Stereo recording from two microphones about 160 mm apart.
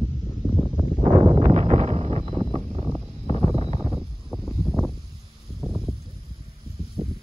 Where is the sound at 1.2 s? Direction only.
35° right (ahead or behind).